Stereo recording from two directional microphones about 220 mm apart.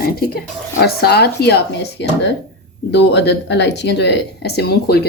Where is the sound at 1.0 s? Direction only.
45° left (ahead or behind).